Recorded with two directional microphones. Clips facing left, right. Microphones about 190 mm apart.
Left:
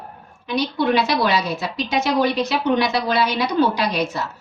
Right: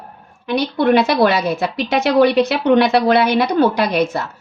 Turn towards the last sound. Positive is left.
turn(degrees=-55)  # may be behind; listen again after turning